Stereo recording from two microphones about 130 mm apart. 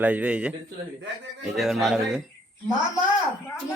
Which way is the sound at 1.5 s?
Centre (ahead or behind).